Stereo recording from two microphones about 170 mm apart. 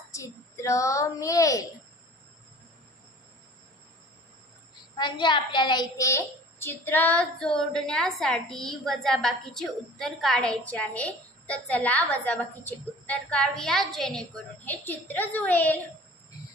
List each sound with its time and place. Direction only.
0.1 s a child's voice: 20° left (ahead or behind)
4.9 s a child's voice: 25° left (ahead or behind); by 15.8 s 10° left (ahead or behind)